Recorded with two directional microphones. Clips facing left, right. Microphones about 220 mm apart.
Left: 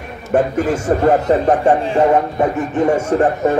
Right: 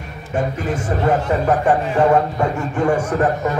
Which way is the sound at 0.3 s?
45° left (ahead or behind).